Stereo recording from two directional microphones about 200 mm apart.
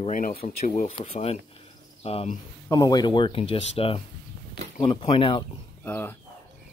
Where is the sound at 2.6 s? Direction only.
20° left (ahead or behind).